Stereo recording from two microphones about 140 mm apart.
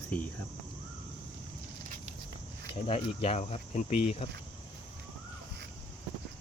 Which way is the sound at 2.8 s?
45° left (ahead or behind).